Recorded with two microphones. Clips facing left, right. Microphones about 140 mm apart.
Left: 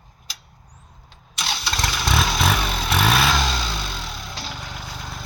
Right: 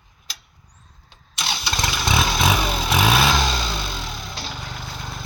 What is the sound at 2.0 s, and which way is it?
Vehicle, centre (ahead or behind).